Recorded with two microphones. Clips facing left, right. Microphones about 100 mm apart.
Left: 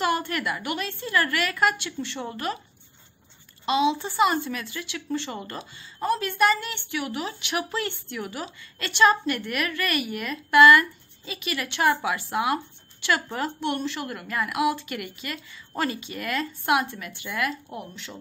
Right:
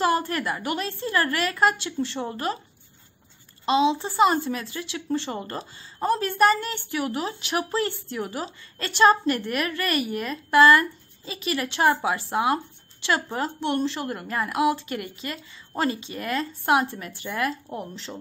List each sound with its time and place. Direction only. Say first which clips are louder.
0.0 s speech: right 2 dB; 30° right (ahead or behind)
3.6 s speech: right 2 dB; 30° right (ahead or behind)